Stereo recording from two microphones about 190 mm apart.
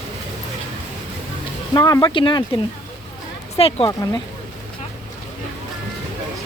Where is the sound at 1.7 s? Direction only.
20° left (ahead or behind).